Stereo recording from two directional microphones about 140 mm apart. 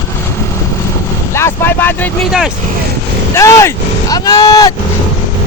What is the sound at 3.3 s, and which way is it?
Speech, 20° left (ahead or behind).